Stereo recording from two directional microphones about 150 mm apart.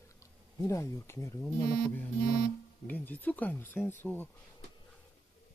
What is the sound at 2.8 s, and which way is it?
Speech, 10° left (ahead or behind).